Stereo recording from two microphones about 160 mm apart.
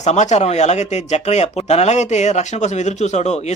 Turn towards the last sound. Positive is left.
turn(degrees=45)  # may be behind; listen again after turning